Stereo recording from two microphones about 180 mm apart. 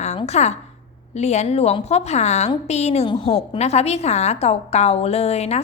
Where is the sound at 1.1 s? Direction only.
40° left (ahead or behind).